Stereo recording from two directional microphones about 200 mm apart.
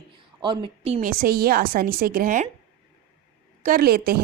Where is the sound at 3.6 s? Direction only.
45° right (ahead or behind).